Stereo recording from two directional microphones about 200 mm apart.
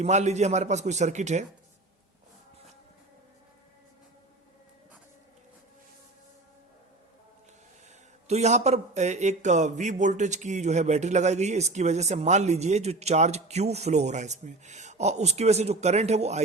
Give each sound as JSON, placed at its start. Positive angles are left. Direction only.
{"t": 0.0, "sound": "speech", "side_deg": -35}
{"t": 8.3, "sound": "speech", "side_deg": -35}